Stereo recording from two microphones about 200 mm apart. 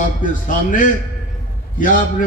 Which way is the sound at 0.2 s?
40° left (ahead or behind).